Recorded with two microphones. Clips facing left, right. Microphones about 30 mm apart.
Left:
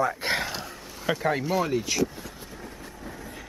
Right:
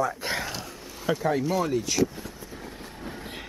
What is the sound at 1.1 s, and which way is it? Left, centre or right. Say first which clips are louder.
Speech: even; left.